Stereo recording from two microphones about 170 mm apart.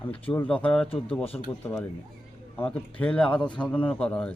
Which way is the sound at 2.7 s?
5° left (ahead or behind).